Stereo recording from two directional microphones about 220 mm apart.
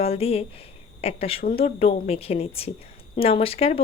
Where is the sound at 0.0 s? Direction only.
25° left (ahead or behind).